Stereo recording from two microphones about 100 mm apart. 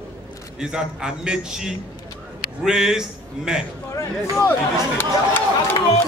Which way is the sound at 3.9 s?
30° left (ahead or behind).